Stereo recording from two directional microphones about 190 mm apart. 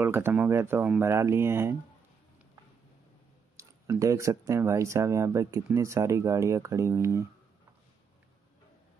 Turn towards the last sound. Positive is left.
turn(degrees=-15)  # may be behind; listen again after turning